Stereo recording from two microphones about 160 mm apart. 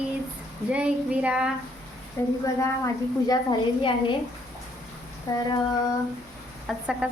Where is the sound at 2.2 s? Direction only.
15° left (ahead or behind).